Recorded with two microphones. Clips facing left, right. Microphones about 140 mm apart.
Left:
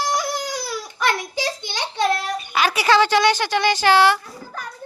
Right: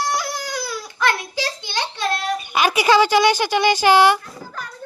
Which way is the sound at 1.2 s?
20° left (ahead or behind).